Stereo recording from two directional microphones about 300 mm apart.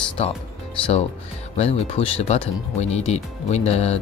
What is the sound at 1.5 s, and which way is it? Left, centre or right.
Speech, centre.